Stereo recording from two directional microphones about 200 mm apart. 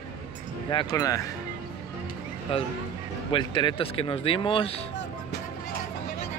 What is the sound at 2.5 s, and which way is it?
Speech, 25° left (ahead or behind).